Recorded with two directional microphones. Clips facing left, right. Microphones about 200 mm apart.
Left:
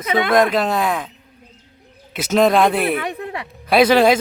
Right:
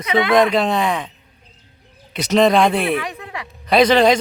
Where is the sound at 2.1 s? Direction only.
5° left (ahead or behind).